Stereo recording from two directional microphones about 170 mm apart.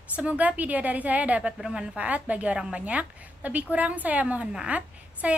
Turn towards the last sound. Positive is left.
turn(degrees=-10)  # may be behind; listen again after turning